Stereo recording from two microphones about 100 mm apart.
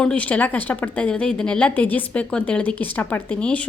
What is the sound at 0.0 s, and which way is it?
A woman's voice, 10° left (ahead or behind).